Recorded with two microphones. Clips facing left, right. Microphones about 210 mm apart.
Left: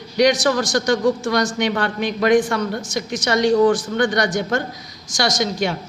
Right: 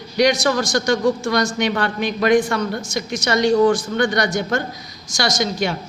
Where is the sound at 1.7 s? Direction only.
15° left (ahead or behind).